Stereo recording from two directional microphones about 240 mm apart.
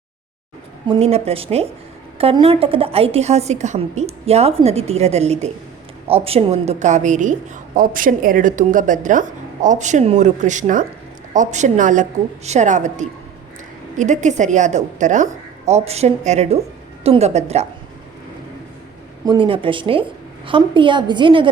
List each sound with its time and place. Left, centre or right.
0.9 s a woman's voice: right
19.2 s a woman's voice: centre